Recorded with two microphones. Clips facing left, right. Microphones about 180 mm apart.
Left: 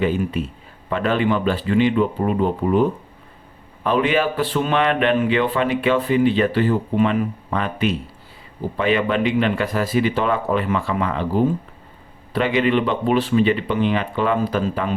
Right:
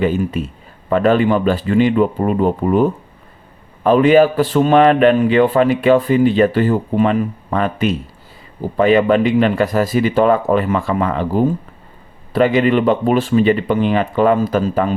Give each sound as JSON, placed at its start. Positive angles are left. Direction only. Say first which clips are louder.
{"t": 0.0, "sound": "a man's voice", "louder": "right 3 dB", "side_deg": -45}
{"t": 3.8, "sound": "a man's voice", "louder": "right 8 dB", "side_deg": -40}